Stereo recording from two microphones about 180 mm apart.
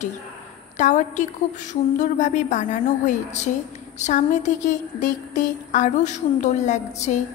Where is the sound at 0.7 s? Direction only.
45° left (ahead or behind).